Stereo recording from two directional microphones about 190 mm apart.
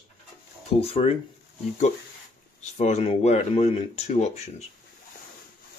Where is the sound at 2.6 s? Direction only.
35° left (ahead or behind).